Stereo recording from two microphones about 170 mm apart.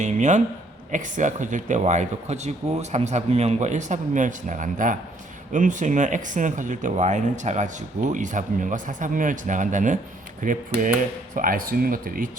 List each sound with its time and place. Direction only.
0.0 s speech: 45° right (ahead or behind)